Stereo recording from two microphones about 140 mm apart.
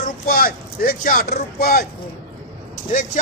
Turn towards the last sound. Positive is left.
turn(degrees=65)  # may be behind; listen again after turning